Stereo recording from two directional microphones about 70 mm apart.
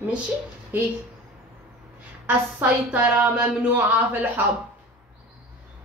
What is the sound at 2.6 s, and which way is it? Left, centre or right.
A woman's voice, right.